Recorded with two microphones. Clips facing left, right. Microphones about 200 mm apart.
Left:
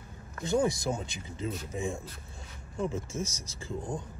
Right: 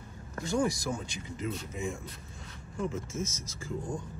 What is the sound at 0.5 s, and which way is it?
Speech, 20° left (ahead or behind).